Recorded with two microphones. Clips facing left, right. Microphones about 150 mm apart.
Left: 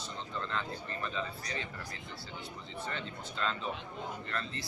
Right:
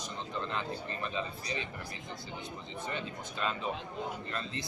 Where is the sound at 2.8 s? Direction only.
15° right (ahead or behind).